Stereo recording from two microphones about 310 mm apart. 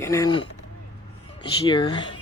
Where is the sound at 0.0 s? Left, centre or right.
Centre.